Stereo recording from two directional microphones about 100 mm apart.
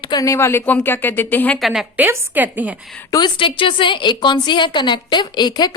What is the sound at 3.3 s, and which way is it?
A woman's voice, 60° left (ahead or behind).